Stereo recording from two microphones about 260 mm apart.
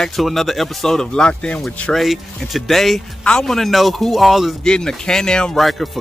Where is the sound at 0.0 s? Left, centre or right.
Centre.